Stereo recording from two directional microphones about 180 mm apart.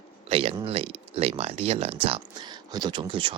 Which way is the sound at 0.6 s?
35° right (ahead or behind).